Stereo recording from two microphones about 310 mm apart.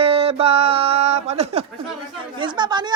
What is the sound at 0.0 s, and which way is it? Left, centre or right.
Music, centre.